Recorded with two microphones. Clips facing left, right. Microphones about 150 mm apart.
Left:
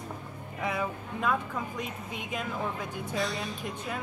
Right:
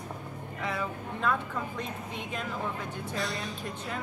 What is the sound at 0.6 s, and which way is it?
Speech, 15° left (ahead or behind).